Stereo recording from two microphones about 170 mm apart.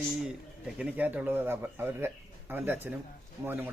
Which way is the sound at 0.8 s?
10° right (ahead or behind).